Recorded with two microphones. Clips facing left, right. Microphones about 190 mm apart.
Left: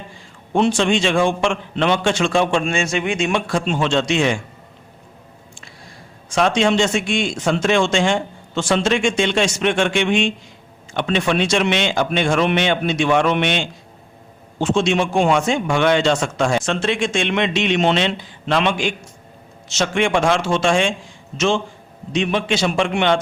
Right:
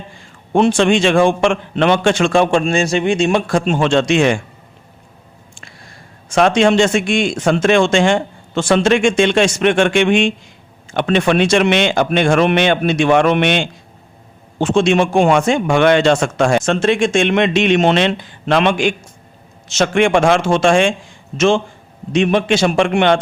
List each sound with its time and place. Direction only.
0.5 s a man's voice: 55° right (ahead or behind); by 3.4 s 35° right (ahead or behind)
3.4 s a man's voice: 50° right (ahead or behind)
6.3 s a man's voice: 55° right (ahead or behind)